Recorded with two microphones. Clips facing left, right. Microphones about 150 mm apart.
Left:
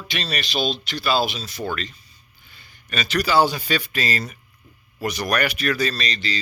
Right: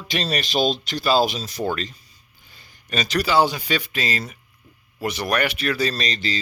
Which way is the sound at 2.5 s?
40° right (ahead or behind).